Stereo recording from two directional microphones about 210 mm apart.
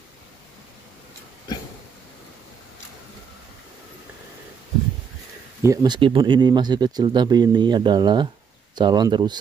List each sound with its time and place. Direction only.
5.6 s speech: 15° right (ahead or behind)